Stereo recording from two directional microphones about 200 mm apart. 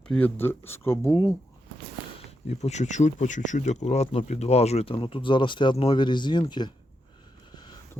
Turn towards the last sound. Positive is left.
turn(degrees=20)  # may be behind; listen again after turning